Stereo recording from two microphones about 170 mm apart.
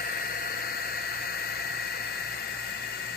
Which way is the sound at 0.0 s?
65° left (ahead or behind).